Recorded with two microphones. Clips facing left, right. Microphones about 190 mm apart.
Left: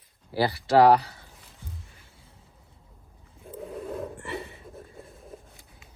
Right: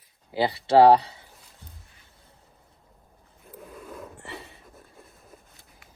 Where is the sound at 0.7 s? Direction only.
30° right (ahead or behind).